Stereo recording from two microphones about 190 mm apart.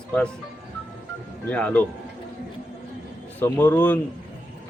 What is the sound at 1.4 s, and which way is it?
Speech, 5° left (ahead or behind).